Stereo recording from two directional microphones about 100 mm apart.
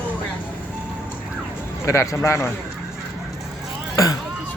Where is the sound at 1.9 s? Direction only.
30° left (ahead or behind).